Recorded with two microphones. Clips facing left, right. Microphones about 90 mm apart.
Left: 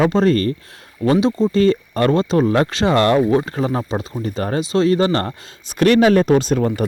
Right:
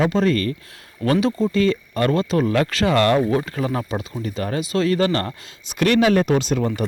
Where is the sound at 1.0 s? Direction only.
20° left (ahead or behind).